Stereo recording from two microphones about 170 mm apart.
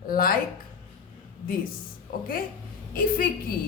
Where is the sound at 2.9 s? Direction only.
55° left (ahead or behind).